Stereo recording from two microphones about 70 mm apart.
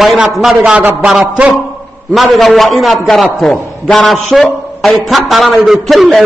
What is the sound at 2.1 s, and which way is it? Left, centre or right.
A man's voice, centre.